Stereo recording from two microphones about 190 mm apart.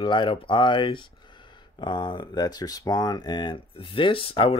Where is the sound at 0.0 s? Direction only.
25° left (ahead or behind).